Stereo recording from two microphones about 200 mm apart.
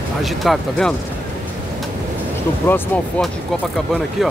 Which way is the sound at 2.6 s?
10° left (ahead or behind).